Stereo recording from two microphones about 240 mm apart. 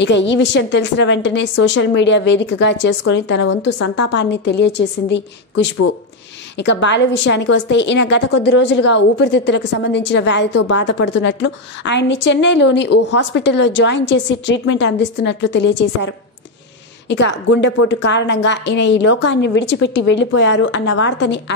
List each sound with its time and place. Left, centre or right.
0.0 s a woman's voice: left
3.4 s a woman's voice: left
4.0 s a woman's voice: left
17.1 s a woman's voice: left